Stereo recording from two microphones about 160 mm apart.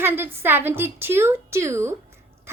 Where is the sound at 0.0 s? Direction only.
15° right (ahead or behind).